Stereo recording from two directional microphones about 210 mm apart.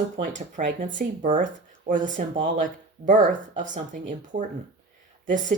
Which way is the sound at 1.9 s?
35° right (ahead or behind).